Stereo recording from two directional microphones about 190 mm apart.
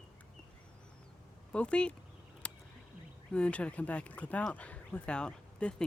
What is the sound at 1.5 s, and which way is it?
Speech, 5° left (ahead or behind).